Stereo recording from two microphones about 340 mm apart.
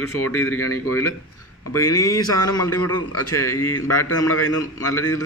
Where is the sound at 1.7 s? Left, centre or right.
Centre.